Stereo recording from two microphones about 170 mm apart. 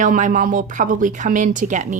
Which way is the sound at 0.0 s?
50° right (ahead or behind).